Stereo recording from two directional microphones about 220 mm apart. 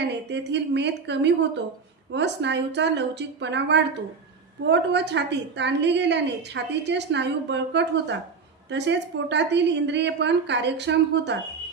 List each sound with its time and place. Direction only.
0.0 s a woman's voice: 50° right (ahead or behind)